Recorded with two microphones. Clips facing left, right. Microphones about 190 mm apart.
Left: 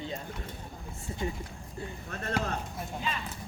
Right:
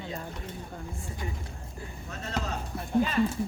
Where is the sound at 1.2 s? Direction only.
25° left (ahead or behind).